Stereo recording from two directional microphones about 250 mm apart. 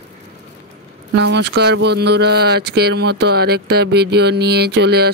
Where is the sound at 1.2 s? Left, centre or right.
Right.